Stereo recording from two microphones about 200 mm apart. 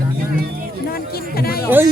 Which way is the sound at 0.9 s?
50° left (ahead or behind).